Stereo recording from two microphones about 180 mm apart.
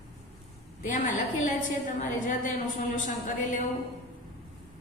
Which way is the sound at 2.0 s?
45° left (ahead or behind).